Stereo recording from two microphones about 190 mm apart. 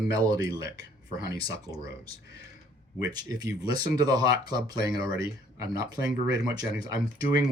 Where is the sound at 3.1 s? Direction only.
20° right (ahead or behind).